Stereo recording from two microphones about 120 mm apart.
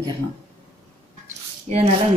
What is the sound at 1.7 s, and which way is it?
Speech, 60° right (ahead or behind).